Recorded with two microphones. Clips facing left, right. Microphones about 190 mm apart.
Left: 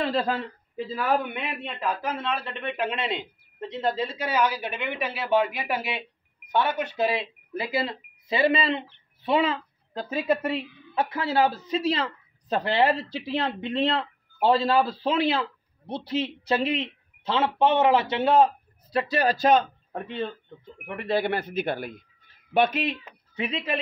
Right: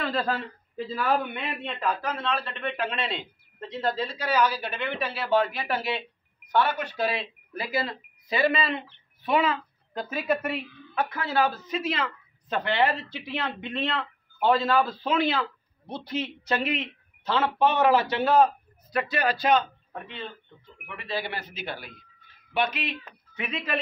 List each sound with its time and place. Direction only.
0.0 s speech: 25° left (ahead or behind)
0.9 s a man's voice: 10° left (ahead or behind)
2.2 s a man's voice: 20° left (ahead or behind); by 20.2 s 40° left (ahead or behind)
20.2 s speech: 50° left (ahead or behind)
23.0 s speech: 30° left (ahead or behind)